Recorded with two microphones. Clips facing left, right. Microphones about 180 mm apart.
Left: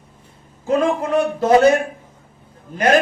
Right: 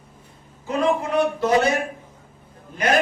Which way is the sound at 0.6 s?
45° left (ahead or behind).